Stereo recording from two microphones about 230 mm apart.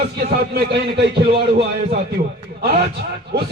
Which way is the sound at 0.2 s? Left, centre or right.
Right.